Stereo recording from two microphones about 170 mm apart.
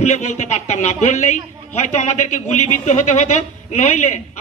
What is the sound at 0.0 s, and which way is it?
A man's voice, 45° left (ahead or behind).